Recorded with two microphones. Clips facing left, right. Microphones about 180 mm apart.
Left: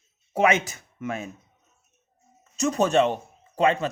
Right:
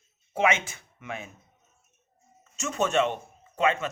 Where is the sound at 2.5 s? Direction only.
35° left (ahead or behind).